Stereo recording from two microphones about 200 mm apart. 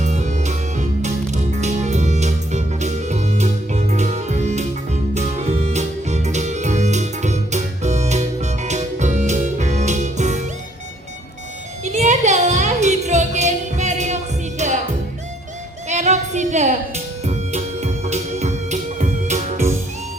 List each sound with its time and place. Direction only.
0.0 s music: 35° right (ahead or behind)
11.9 s music: 35° right (ahead or behind)
15.9 s a sound: 35° right (ahead or behind)
17.2 s music: 35° right (ahead or behind)